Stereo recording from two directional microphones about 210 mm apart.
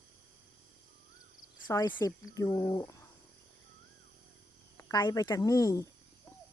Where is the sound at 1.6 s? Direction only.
15° left (ahead or behind).